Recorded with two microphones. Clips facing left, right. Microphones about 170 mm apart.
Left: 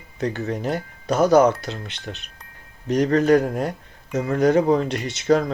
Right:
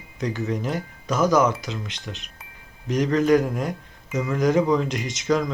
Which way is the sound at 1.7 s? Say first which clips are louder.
Right 1 dB; 60° left (ahead or behind).